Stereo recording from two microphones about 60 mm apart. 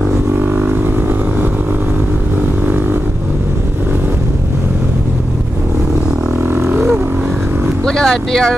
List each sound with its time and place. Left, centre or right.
0.4 s vehicle: right
7.8 s speech: centre